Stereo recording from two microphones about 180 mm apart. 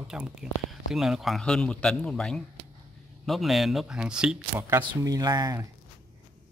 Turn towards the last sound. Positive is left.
turn(degrees=-20)  # may be behind; listen again after turning